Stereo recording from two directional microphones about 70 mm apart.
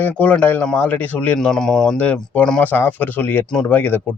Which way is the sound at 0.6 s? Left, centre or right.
Centre.